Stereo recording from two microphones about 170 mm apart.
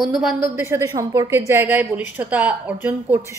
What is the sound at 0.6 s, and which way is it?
A woman's voice, 15° right (ahead or behind).